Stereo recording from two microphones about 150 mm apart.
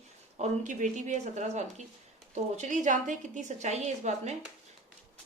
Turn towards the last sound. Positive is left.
turn(degrees=-50)  # may be behind; listen again after turning